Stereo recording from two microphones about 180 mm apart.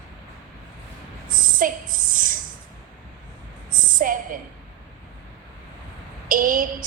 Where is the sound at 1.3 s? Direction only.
50° right (ahead or behind).